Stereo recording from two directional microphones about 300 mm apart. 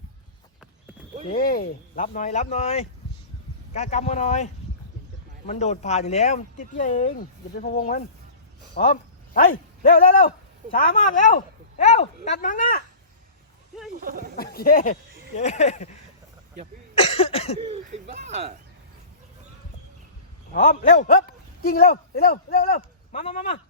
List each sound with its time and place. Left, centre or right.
1.3 s speech: left
5.5 s speech: left
14.0 s speech: right
14.3 s speech: left
17.0 s cough: centre
17.6 s speech: right
20.5 s speech: left